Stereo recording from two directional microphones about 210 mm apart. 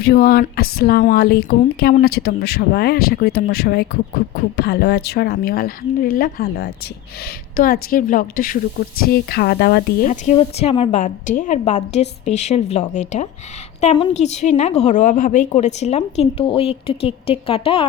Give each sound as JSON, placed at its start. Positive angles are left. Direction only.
{"t": 0.0, "sound": "speech", "side_deg": 45}
{"t": 13.8, "sound": "a woman's voice", "side_deg": 25}